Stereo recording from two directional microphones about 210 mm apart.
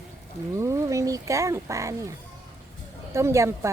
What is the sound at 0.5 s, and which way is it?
Speech, 15° right (ahead or behind).